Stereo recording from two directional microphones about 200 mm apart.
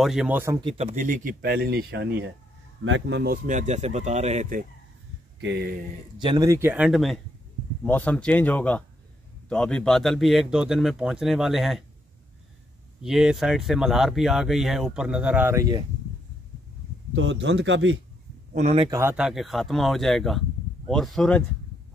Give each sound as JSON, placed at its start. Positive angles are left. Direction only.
{"t": 0.0, "sound": "speech", "side_deg": -5}
{"t": 0.6, "sound": "speech", "side_deg": -25}
{"t": 3.4, "sound": "speech", "side_deg": -35}
{"t": 5.4, "sound": "speech", "side_deg": -60}
{"t": 6.1, "sound": "speech", "side_deg": -20}
{"t": 13.0, "sound": "speech", "side_deg": 0}
{"t": 17.1, "sound": "speech", "side_deg": -65}
{"t": 18.5, "sound": "speech", "side_deg": -40}
{"t": 18.8, "sound": "speech", "side_deg": -15}